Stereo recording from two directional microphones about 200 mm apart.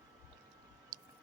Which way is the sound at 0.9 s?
20° right (ahead or behind).